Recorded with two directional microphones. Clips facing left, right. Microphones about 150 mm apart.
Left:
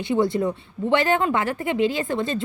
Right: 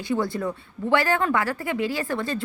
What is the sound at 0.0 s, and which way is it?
A woman's voice, 20° left (ahead or behind).